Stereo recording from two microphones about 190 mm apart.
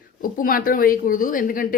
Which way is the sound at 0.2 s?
50° left (ahead or behind).